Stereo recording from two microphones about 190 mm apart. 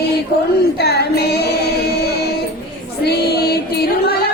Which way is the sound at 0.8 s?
60° left (ahead or behind).